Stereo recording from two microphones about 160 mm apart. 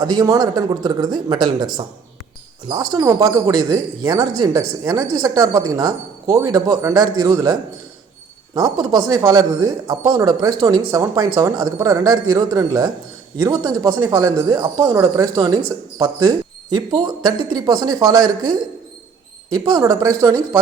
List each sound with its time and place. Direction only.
0.0 s speech: 25° right (ahead or behind)
16.7 s speech: 25° right (ahead or behind)
19.5 s speech: 25° right (ahead or behind)